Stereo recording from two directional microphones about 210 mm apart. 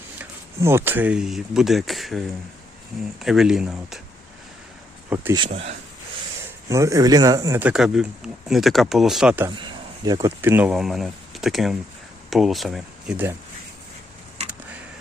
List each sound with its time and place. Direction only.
0.2 s speech: 10° right (ahead or behind)
3.2 s speech: centre (ahead or behind)
5.0 s speech: 10° right (ahead or behind)
5.4 s speech: 30° right (ahead or behind)
6.7 s speech: 15° right (ahead or behind)